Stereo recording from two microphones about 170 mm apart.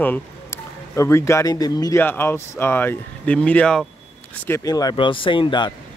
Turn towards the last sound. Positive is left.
turn(degrees=30)  # may be behind; listen again after turning